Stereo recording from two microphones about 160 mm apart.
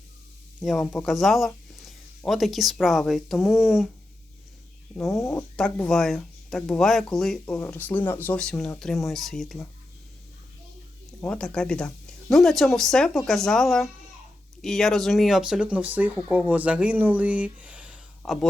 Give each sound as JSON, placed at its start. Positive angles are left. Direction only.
{"t": 0.6, "sound": "speech", "side_deg": 0}
{"t": 4.9, "sound": "speech", "side_deg": 0}
{"t": 11.2, "sound": "speech", "side_deg": 5}